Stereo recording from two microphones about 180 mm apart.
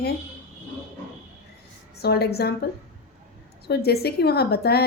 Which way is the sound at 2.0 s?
65° left (ahead or behind).